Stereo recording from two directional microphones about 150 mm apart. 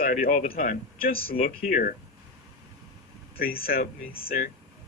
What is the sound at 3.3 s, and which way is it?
Speech, 80° left.